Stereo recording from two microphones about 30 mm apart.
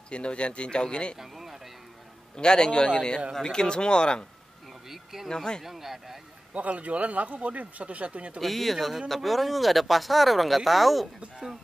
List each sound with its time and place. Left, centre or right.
0.1 s speech: left
1.1 s speech: centre
2.3 s speech: left
4.8 s speech: centre
5.3 s speech: left
5.6 s speech: centre
6.5 s speech: right
8.4 s speech: centre
8.7 s speech: centre